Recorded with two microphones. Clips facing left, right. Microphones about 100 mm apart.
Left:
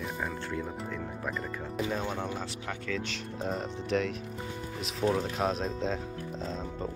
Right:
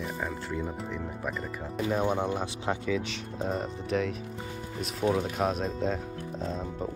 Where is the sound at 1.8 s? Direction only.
10° right (ahead or behind).